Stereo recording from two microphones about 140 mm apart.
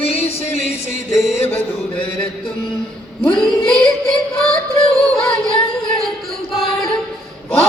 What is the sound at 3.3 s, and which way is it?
Child singing, 5° left (ahead or behind).